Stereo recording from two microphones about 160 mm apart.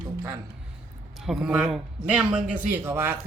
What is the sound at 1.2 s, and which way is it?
Speech, centre (ahead or behind).